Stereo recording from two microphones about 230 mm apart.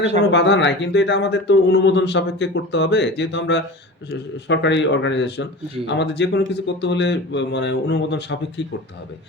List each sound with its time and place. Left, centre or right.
0.3 s speech: left